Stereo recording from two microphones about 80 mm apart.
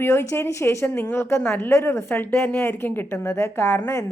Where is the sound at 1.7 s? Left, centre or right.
Left.